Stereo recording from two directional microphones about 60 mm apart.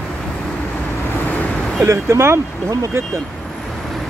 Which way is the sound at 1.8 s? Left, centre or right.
Right.